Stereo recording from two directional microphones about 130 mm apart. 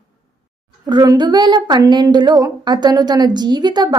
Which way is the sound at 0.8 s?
30° right (ahead or behind).